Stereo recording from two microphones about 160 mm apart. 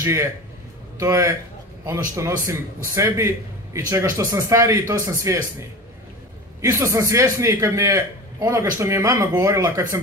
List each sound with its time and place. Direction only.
0.0 s a man's voice: 20° right (ahead or behind)
6.6 s a man's voice: 20° right (ahead or behind)